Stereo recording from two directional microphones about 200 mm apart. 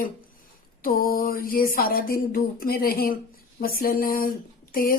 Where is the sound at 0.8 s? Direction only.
45° left (ahead or behind).